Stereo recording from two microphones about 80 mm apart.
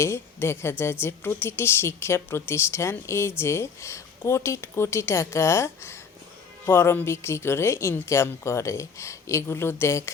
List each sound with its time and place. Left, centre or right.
0.0 s a woman's voice: left